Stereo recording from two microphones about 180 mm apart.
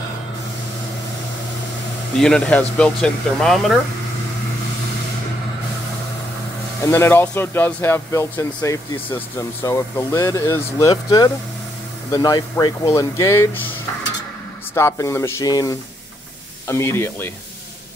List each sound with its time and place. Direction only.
2.1 s speech: 5° left (ahead or behind)
6.8 s speech: 15° left (ahead or behind)
14.7 s speech: 15° left (ahead or behind)